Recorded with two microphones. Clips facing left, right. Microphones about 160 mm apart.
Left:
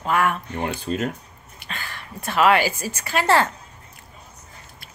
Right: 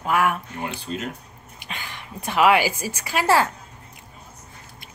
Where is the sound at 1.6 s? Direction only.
15° right (ahead or behind).